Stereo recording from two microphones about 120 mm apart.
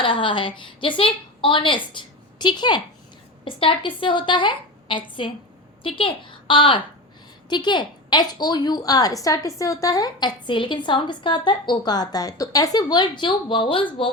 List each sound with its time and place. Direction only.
0.0 s a woman's voice: 45° left (ahead or behind)